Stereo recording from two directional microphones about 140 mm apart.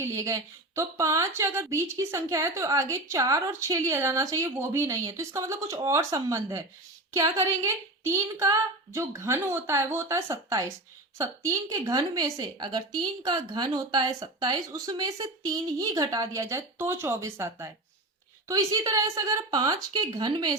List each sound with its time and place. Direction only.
0.0 s speech: 20° right (ahead or behind)